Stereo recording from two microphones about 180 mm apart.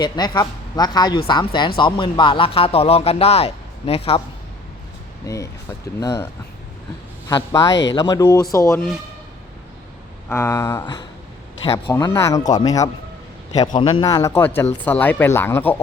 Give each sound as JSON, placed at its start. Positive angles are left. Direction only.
{"t": 0.0, "sound": "speech", "side_deg": 20}
{"t": 5.2, "sound": "speech", "side_deg": 15}
{"t": 7.3, "sound": "speech", "side_deg": 20}
{"t": 7.7, "sound": "speech", "side_deg": 85}
{"t": 7.9, "sound": "speech", "side_deg": 20}
{"t": 10.2, "sound": "speech", "side_deg": 15}